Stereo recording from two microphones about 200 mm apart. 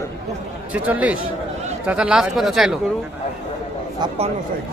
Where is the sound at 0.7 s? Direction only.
5° right (ahead or behind).